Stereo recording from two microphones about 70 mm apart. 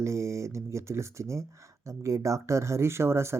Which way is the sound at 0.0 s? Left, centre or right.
Right.